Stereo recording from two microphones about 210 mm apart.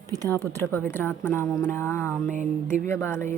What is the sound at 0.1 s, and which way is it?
Speech, 15° right (ahead or behind).